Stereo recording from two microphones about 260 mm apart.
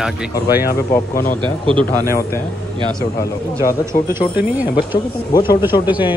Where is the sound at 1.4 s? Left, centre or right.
Centre.